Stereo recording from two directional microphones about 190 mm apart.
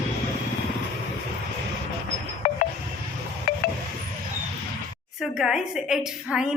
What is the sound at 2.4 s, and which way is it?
Wind chime, 35° left (ahead or behind).